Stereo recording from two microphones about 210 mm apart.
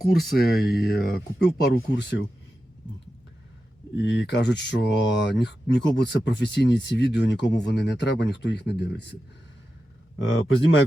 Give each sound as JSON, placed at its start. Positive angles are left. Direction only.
{"t": 0.0, "sound": "speech", "side_deg": 45}
{"t": 0.7, "sound": "speech", "side_deg": 0}
{"t": 0.9, "sound": "speech", "side_deg": 45}
{"t": 3.9, "sound": "speech", "side_deg": 55}
{"t": 10.3, "sound": "speech", "side_deg": 65}